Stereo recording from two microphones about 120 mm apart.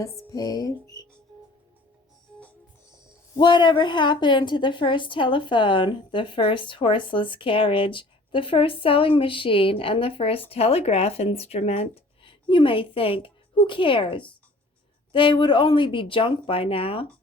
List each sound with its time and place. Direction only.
0.0 s music: 30° left (ahead or behind)
3.3 s a woman's voice: 40° left (ahead or behind)